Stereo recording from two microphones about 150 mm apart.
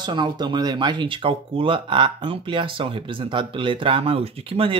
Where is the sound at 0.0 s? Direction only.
30° right (ahead or behind).